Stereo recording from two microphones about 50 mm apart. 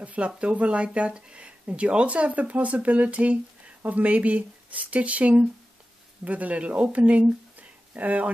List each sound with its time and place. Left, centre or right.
0.0 s speech: right